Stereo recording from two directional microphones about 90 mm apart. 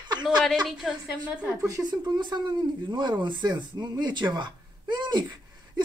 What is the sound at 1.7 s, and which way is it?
Speech, 40° right (ahead or behind).